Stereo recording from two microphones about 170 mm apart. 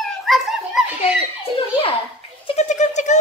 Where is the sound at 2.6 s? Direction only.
45° left (ahead or behind).